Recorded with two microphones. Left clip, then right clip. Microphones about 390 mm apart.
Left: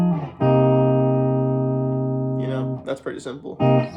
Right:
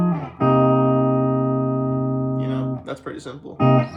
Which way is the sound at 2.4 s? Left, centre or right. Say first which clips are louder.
Even; centre.